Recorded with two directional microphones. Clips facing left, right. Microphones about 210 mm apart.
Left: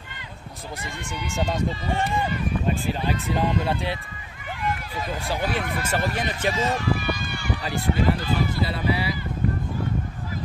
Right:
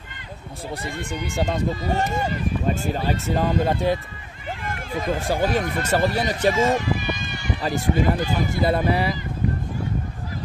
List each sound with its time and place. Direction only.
1.1 s speech: 55° right (ahead or behind)
1.5 s speech: 40° right (ahead or behind)
6.7 s run: 20° right (ahead or behind)
7.6 s speech: 45° right (ahead or behind)